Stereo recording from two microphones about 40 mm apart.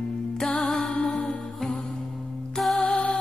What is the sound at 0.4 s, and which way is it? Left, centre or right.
Music, centre.